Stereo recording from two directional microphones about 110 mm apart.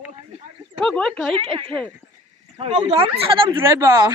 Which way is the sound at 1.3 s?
55° right (ahead or behind).